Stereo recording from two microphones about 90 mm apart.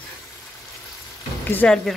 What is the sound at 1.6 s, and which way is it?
Speech, 15° left (ahead or behind).